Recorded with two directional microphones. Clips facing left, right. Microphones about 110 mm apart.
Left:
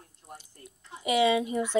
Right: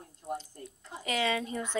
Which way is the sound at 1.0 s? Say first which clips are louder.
Left 7 dB; 15° left (ahead or behind).